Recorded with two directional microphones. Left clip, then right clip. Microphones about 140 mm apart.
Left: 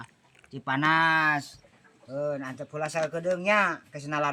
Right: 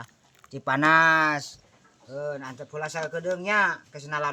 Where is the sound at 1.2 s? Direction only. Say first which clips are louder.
Right 1 dB; 75° right (ahead or behind).